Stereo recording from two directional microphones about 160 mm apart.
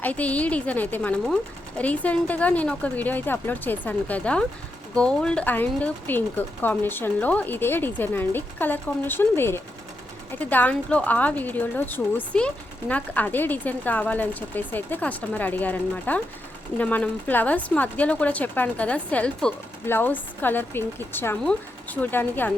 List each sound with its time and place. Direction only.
0.0 s speech: 10° left (ahead or behind)